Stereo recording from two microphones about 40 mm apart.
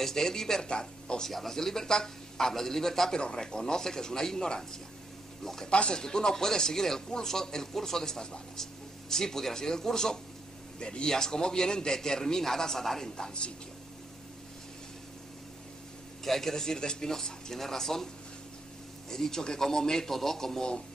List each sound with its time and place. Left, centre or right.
0.0 s speech: centre
1.3 s speech: centre
3.2 s speech: left
5.7 s speech: left
16.3 s speech: centre
19.0 s speech: centre